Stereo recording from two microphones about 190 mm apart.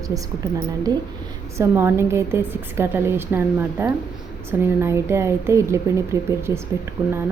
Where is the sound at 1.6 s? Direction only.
15° right (ahead or behind).